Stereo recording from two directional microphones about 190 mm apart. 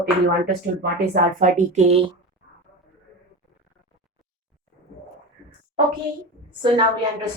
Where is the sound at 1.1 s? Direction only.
40° right (ahead or behind).